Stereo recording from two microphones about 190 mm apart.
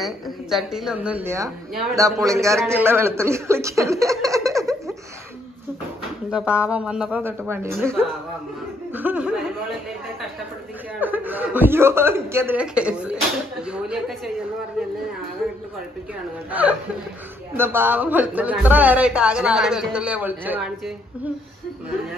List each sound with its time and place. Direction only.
0.0 s a woman's voice: centre (ahead or behind); by 4.9 s 15° right (ahead or behind)
6.3 s a woman's voice: 5° right (ahead or behind)
8.9 s a woman's voice: 10° right (ahead or behind)
11.0 s speech: 10° right (ahead or behind)
17.6 s a woman's voice: 10° right (ahead or behind)